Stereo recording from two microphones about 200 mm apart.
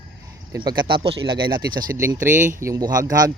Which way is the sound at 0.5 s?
20° right (ahead or behind).